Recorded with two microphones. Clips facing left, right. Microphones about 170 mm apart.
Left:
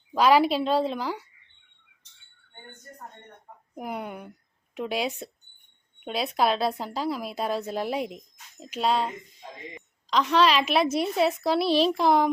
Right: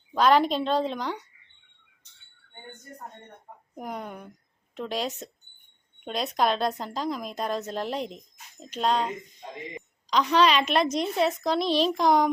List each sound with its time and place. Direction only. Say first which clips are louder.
0.1 s a woman's voice: left 1 dB; 10° left (ahead or behind)
3.8 s a woman's voice: left 2 dB; 10° left (ahead or behind)